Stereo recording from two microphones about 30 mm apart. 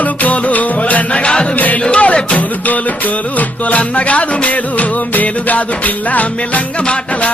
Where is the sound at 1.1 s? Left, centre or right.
Left.